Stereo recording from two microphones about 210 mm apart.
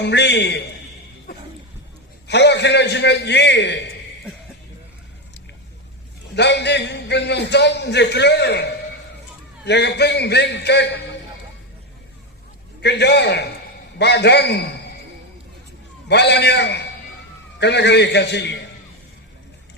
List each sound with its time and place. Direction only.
0.0 s a man's voice: 55° left (ahead or behind)
2.2 s a man's voice: 55° left (ahead or behind)
6.3 s a man's voice: 55° left (ahead or behind)
9.6 s a man's voice: 55° left (ahead or behind)
12.8 s a man's voice: 55° left (ahead or behind)
16.0 s a man's voice: 50° left (ahead or behind)